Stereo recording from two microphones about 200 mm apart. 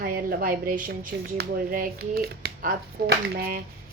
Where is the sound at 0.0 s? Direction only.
45° right (ahead or behind).